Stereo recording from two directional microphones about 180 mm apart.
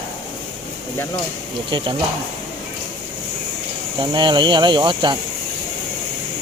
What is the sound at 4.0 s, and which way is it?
Speech, 25° right (ahead or behind).